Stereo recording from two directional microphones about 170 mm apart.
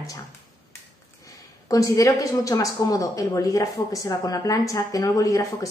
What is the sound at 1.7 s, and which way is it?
A woman's voice, 20° left (ahead or behind).